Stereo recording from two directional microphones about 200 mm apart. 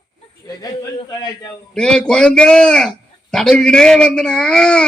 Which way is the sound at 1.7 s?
5° left (ahead or behind).